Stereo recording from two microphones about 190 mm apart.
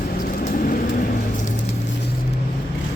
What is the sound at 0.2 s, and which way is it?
Vehicle, 45° left (ahead or behind).